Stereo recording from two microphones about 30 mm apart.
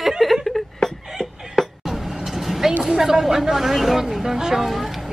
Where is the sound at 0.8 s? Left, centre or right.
Centre.